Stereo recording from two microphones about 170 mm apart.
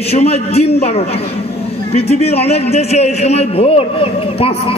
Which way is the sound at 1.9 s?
35° left (ahead or behind).